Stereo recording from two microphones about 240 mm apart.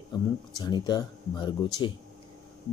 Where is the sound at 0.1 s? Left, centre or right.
Centre.